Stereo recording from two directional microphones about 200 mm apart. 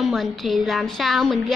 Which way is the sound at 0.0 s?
Centre (ahead or behind).